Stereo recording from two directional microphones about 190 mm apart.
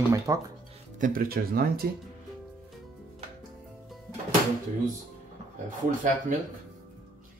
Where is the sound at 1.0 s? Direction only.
45° right (ahead or behind).